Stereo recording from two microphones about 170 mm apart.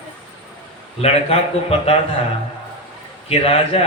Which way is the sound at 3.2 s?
35° left (ahead or behind).